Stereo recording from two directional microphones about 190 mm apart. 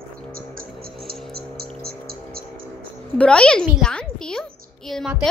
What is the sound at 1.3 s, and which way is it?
Music, 55° right (ahead or behind).